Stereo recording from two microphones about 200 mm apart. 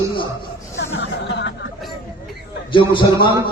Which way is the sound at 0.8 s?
60° left (ahead or behind).